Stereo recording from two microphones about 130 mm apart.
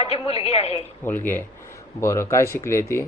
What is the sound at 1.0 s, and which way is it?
Speech, 15° left (ahead or behind).